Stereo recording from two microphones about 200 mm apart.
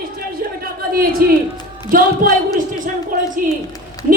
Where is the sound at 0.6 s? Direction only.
45° right (ahead or behind).